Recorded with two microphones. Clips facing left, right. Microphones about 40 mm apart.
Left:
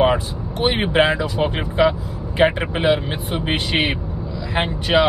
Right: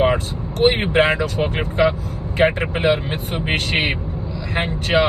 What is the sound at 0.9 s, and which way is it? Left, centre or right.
Speech, right.